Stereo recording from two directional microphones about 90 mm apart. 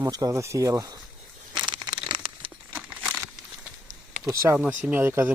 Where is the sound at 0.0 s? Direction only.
40° right (ahead or behind).